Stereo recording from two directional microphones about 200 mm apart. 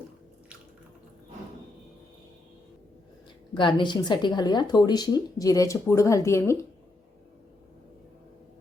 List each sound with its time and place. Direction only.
3.5 s speech: 25° left (ahead or behind)